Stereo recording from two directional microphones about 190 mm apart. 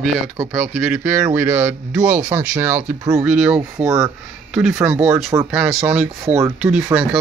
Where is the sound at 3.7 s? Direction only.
15° right (ahead or behind).